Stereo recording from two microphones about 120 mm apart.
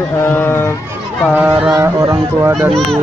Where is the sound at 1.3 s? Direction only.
15° right (ahead or behind).